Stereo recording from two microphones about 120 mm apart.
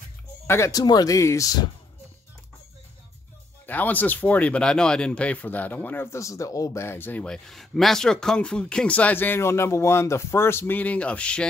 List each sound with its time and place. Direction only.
0.5 s speech: 25° left (ahead or behind)
3.6 s speech: 15° left (ahead or behind)